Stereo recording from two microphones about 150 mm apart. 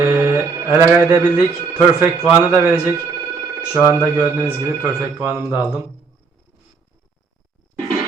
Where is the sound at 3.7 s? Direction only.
15° right (ahead or behind).